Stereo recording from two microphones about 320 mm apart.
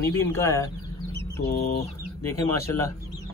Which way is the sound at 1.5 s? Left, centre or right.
Left.